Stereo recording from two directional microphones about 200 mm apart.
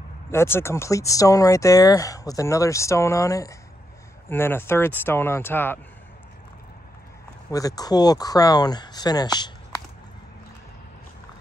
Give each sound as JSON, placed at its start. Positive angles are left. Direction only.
{"t": 0.3, "sound": "speech", "side_deg": 10}
{"t": 7.5, "sound": "speech", "side_deg": 20}